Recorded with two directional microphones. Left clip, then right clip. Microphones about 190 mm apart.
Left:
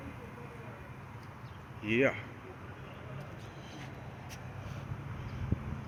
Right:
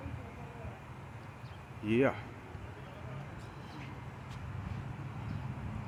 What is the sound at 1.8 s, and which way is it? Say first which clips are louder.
Speech: left 1 dB; 20° right (ahead or behind).